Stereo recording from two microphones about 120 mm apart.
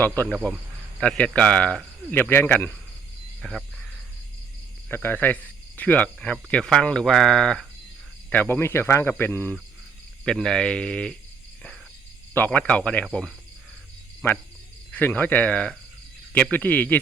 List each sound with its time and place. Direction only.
0.0 s a man's voice: 15° left (ahead or behind)
3.4 s a sound: centre (ahead or behind)
5.0 s cricket: 15° left (ahead or behind)
6.3 s speech: 5° left (ahead or behind)
10.2 s speech: 5° left (ahead or behind)
12.3 s speech: 15° left (ahead or behind)
14.9 s speech: 15° left (ahead or behind)